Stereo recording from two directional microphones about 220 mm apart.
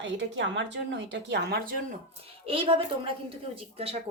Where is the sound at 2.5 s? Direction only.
25° right (ahead or behind).